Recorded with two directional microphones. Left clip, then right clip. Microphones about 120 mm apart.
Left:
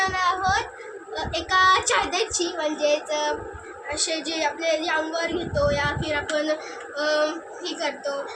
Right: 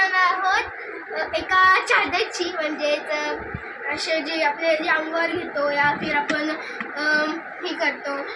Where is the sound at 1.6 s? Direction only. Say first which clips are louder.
Right 2 dB; 15° left (ahead or behind).